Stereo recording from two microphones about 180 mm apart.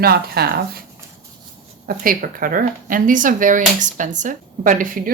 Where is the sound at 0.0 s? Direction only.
60° right (ahead or behind).